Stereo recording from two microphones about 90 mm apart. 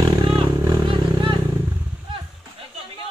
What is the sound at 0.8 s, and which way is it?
Vehicle, 65° right (ahead or behind).